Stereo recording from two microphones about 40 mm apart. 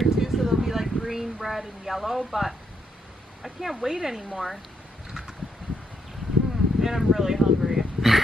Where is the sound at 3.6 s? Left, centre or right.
Centre.